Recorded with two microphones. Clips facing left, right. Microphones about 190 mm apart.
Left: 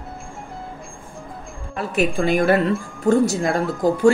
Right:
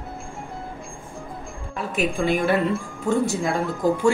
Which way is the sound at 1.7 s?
80° left.